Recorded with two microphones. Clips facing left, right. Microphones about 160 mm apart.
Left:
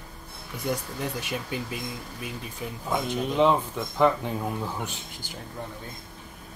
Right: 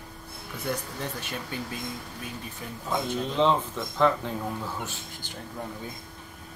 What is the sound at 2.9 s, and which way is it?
Speech, 15° left (ahead or behind).